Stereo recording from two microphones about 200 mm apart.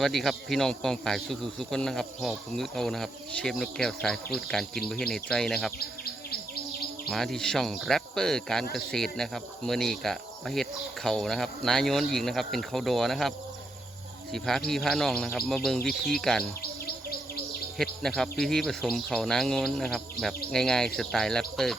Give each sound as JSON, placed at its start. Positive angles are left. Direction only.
{"t": 0.0, "sound": "speech", "side_deg": 0}
{"t": 7.1, "sound": "speech", "side_deg": 0}
{"t": 14.3, "sound": "speech", "side_deg": 0}
{"t": 16.8, "sound": "insect", "side_deg": 50}
{"t": 17.7, "sound": "speech", "side_deg": 0}